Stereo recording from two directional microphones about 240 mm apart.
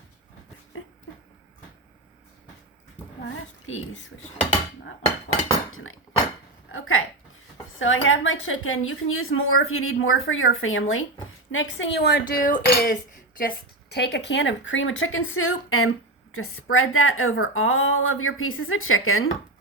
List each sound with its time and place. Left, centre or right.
5.7 s a woman's voice: left